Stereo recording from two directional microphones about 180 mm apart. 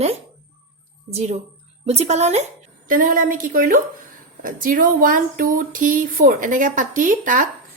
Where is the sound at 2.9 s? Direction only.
50° right (ahead or behind).